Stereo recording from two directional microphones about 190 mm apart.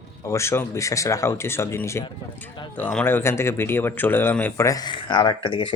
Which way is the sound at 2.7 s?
5° left (ahead or behind).